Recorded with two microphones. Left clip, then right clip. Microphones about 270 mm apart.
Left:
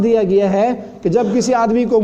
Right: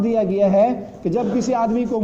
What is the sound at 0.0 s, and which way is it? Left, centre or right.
A man's voice, left.